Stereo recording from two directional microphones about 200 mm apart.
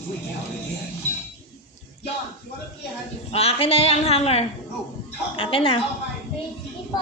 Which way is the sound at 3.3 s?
30° left (ahead or behind).